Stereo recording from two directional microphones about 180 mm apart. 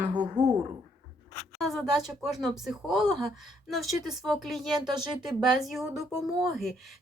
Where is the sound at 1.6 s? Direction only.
Centre (ahead or behind).